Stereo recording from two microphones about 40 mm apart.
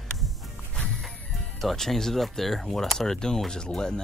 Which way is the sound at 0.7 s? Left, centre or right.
Centre.